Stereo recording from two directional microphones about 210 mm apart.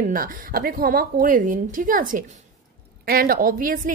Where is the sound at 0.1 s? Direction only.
45° right (ahead or behind).